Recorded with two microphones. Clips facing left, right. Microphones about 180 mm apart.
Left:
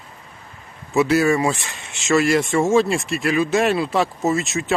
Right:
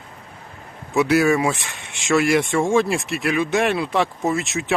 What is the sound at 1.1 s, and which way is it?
Speech, centre (ahead or behind).